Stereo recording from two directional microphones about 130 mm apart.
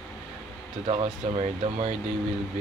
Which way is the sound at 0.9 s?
50° right (ahead or behind).